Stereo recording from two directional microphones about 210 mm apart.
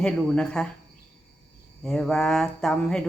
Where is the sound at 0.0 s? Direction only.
5° left (ahead or behind).